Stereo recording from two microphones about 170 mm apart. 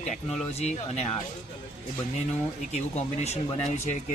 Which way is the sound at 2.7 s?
40° left (ahead or behind).